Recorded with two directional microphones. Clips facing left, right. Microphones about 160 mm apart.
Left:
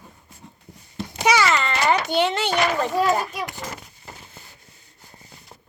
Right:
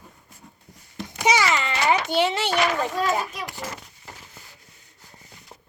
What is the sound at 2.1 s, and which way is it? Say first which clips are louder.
Speech: left 1 dB; 5° right (ahead or behind).